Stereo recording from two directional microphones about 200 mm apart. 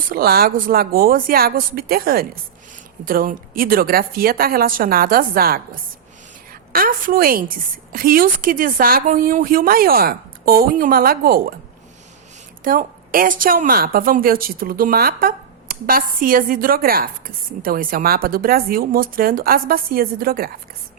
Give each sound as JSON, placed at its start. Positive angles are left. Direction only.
{"t": 0.1, "sound": "a woman's voice", "side_deg": -50}
{"t": 6.7, "sound": "a woman's voice", "side_deg": -45}
{"t": 12.6, "sound": "a woman's voice", "side_deg": -45}